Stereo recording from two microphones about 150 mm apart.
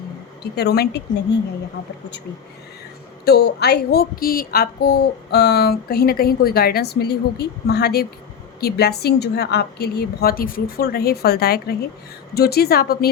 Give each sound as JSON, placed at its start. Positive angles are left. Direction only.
{"t": 0.5, "sound": "a woman's voice", "side_deg": 90}
{"t": 3.2, "sound": "a woman's voice", "side_deg": 90}